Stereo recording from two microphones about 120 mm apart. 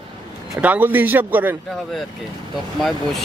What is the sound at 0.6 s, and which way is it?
Speech, 15° right (ahead or behind).